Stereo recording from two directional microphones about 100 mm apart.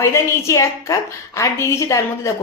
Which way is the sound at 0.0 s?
30° left (ahead or behind).